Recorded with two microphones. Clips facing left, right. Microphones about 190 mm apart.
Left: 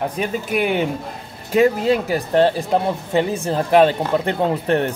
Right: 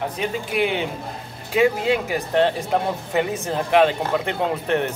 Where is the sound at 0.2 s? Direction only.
50° left (ahead or behind).